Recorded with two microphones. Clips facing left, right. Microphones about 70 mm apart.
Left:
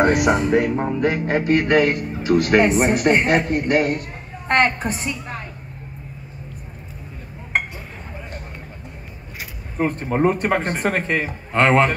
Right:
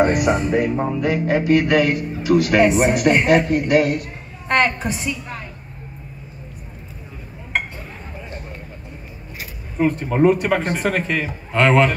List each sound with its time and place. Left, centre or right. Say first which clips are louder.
0.0 s speech: even; left
0.7 s a man's voice: even; left
9.8 s a man's voice: right 3 dB; left